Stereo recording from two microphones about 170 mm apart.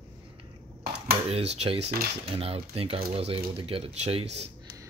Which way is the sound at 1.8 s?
65° right (ahead or behind).